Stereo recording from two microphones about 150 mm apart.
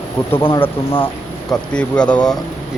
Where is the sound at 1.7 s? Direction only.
5° left (ahead or behind).